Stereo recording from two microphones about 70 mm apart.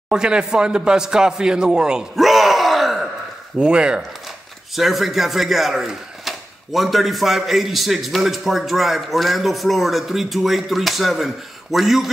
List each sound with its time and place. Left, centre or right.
0.1 s speech: centre
3.5 s speech: centre
4.7 s speech: centre